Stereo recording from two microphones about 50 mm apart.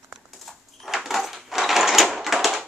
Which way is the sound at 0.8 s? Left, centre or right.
Centre.